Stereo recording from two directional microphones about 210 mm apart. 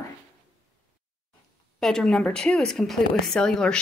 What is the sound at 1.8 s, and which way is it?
Speech, centre (ahead or behind).